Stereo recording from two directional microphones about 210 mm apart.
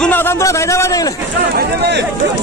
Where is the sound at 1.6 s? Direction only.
50° right (ahead or behind).